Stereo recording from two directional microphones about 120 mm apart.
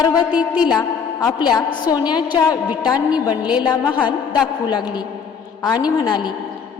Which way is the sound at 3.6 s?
35° left (ahead or behind).